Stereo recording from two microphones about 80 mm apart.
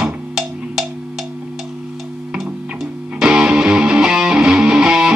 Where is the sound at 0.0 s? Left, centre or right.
Centre.